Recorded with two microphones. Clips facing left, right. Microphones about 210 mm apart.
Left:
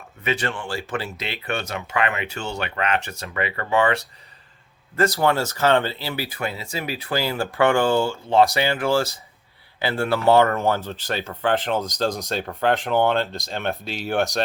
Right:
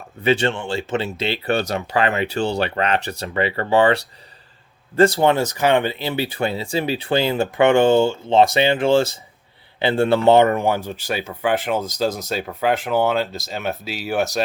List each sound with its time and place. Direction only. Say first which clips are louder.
0.2 s speech: right 7 dB; 30° right (ahead or behind); by 14.4 s 5° right (ahead or behind)